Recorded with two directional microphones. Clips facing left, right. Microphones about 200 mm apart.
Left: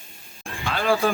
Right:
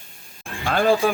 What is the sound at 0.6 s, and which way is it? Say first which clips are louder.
Speech: right 6 dB; 45° right (ahead or behind).